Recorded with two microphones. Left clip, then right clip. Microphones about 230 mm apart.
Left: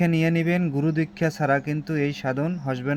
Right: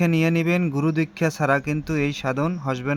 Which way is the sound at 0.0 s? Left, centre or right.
Centre.